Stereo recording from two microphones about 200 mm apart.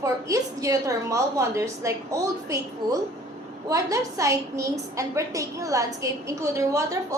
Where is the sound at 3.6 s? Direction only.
15° right (ahead or behind).